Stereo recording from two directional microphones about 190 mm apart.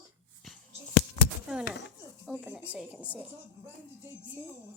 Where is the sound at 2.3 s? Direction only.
Centre (ahead or behind).